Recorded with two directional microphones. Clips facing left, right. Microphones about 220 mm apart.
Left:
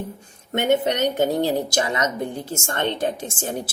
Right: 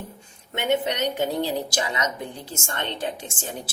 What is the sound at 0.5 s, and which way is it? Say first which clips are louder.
A woman's voice: left 4 dB; 45° left (ahead or behind).